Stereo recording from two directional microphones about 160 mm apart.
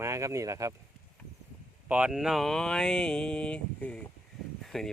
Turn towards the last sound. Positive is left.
turn(degrees=0)  # may be behind; listen again after turning